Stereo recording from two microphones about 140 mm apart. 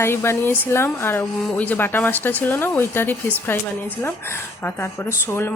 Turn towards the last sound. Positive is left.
turn(degrees=15)  # may be behind; listen again after turning